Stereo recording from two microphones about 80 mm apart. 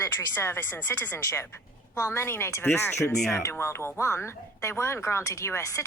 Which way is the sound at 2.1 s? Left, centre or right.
Left.